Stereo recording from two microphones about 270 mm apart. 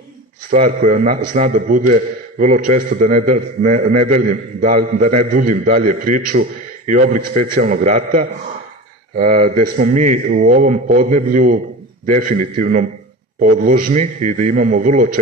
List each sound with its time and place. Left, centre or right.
0.5 s a man's voice: right